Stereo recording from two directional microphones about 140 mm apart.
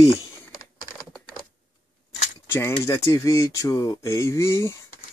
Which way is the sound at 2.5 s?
15° left (ahead or behind).